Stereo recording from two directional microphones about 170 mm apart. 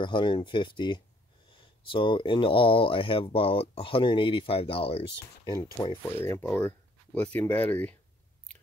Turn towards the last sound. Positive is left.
turn(degrees=10)  # may be behind; listen again after turning